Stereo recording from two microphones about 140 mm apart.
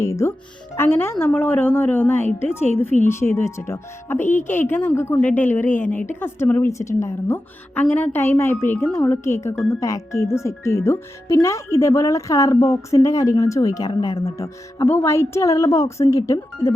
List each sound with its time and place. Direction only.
0.0 s a woman's voice: 20° left (ahead or behind)